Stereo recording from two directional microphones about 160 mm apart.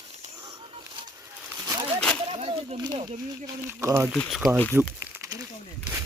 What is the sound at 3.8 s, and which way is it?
Speech, 15° right (ahead or behind).